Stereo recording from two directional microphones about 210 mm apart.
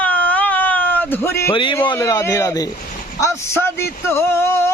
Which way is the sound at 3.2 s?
15° left (ahead or behind).